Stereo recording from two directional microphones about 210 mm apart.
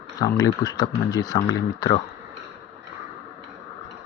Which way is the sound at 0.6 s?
15° left (ahead or behind).